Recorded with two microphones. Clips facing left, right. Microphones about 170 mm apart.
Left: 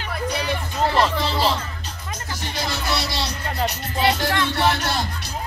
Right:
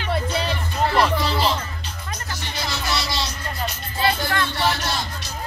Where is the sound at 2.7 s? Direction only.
60° left (ahead or behind); by 4.3 s 80° left.